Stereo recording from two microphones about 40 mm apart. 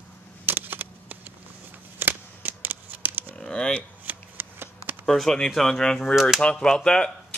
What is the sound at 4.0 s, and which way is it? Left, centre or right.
Shuffling cards, right.